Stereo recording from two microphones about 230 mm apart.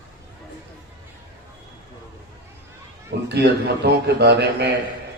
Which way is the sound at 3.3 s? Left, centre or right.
Right.